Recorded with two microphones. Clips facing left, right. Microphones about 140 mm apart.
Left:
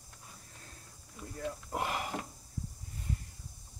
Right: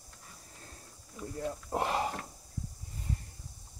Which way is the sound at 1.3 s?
30° right (ahead or behind).